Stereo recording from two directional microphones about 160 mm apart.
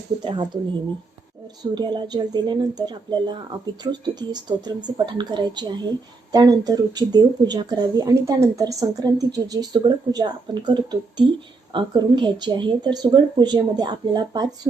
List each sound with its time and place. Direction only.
0.3 s speech: 30° right (ahead or behind)
1.7 s speech: 25° right (ahead or behind)